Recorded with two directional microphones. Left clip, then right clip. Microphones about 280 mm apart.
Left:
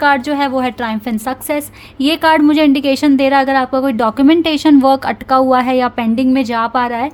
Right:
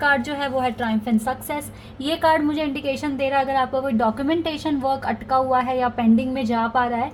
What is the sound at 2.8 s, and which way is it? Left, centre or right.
Speech, left.